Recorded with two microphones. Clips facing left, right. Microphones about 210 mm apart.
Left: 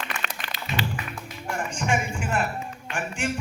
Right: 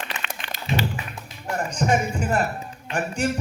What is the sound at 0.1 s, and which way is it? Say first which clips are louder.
Music: left 1 dB; 20° right (ahead or behind).